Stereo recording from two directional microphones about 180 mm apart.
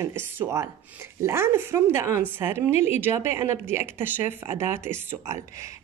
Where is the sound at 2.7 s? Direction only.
40° left (ahead or behind).